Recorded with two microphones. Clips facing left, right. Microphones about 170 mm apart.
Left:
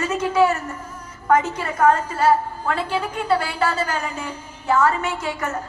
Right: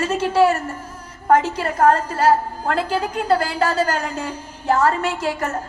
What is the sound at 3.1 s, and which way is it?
A woman's voice, 40° right (ahead or behind).